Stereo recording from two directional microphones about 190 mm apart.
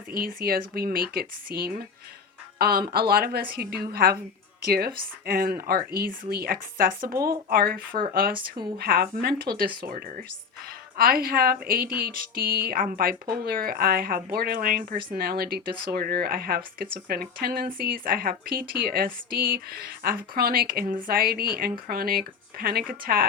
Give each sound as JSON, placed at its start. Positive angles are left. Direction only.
{"t": 0.1, "sound": "a woman's voice", "side_deg": -50}
{"t": 10.9, "sound": "speech", "side_deg": -50}